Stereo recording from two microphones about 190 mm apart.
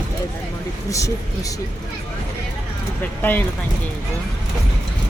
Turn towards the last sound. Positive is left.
turn(degrees=10)  # may be behind; listen again after turning